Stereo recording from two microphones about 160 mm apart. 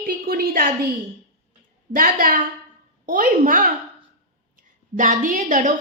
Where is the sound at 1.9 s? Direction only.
60° right (ahead or behind).